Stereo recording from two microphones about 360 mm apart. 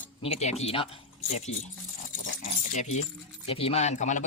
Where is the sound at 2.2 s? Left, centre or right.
Left.